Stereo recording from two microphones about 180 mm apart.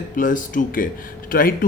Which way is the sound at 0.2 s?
50° left (ahead or behind).